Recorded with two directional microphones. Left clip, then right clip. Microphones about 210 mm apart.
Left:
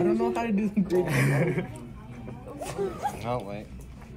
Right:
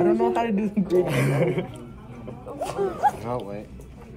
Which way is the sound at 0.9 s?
Centre (ahead or behind).